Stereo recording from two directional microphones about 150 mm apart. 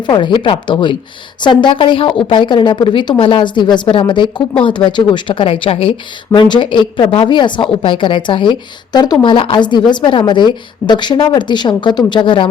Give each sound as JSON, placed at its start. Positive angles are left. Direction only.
{"t": 0.1, "sound": "a woman's voice", "side_deg": 30}